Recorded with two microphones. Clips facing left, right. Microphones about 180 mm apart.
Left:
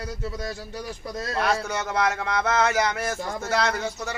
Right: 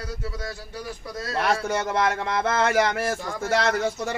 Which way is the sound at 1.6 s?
50° right (ahead or behind).